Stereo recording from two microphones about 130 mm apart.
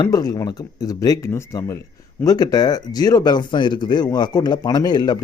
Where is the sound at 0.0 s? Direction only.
30° left (ahead or behind).